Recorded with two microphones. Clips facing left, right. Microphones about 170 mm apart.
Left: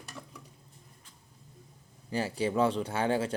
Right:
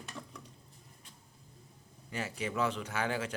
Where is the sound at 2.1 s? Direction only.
30° left (ahead or behind).